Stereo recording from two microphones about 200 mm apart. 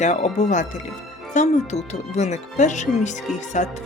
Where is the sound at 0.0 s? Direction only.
35° left (ahead or behind).